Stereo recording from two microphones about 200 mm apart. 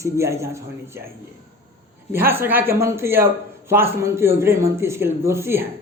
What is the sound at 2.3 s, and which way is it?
A woman's voice, 10° right (ahead or behind).